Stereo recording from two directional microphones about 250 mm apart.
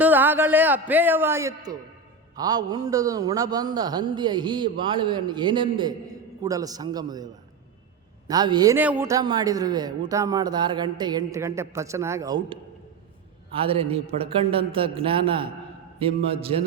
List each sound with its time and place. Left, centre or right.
0.0 s a man's voice: centre
8.3 s a man's voice: centre